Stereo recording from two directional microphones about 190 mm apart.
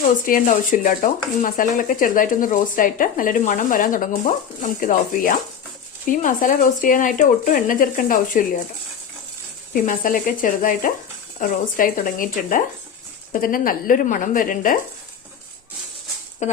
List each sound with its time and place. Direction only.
0.3 s speech: 45° left (ahead or behind)
9.8 s speech: 45° left (ahead or behind)
16.4 s speech: 40° left (ahead or behind)